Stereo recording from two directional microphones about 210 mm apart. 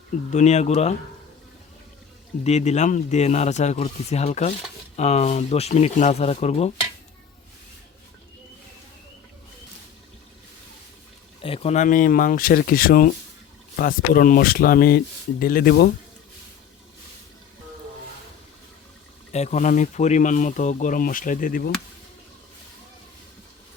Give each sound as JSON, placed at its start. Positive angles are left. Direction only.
{"t": 0.3, "sound": "speech", "side_deg": 35}
{"t": 2.4, "sound": "speech", "side_deg": 30}
{"t": 11.3, "sound": "speech", "side_deg": 25}
{"t": 19.3, "sound": "speech", "side_deg": 30}